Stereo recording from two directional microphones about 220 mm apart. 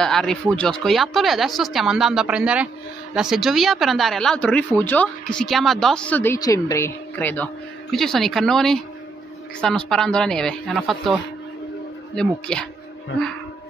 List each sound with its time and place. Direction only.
0.0 s a woman's voice: centre (ahead or behind)
12.2 s speech: 5° left (ahead or behind)